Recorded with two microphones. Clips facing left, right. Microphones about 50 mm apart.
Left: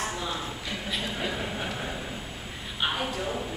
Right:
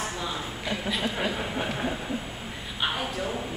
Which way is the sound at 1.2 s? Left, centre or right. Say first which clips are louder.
Right 2 dB; centre.